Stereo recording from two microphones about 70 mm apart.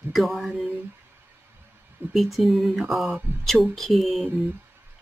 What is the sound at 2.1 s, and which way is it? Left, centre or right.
Speech, centre.